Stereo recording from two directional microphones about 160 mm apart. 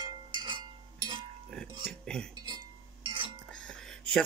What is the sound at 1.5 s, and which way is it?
Music, 5° left (ahead or behind).